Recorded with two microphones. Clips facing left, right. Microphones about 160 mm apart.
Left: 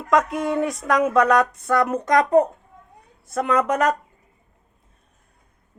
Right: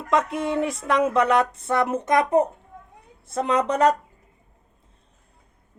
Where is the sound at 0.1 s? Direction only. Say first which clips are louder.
Left 2 dB; 25° right (ahead or behind).